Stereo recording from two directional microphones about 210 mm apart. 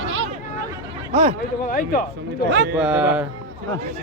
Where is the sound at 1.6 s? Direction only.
40° left (ahead or behind).